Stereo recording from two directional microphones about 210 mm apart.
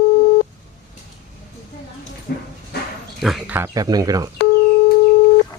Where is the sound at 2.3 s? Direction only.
50° left (ahead or behind).